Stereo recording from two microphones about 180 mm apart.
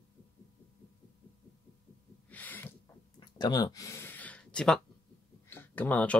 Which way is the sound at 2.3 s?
10° left (ahead or behind).